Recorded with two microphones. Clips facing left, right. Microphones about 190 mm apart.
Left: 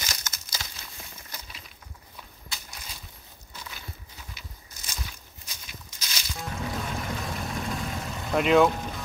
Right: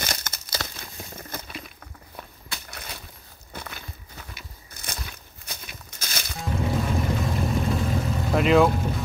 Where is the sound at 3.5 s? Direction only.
60° right (ahead or behind).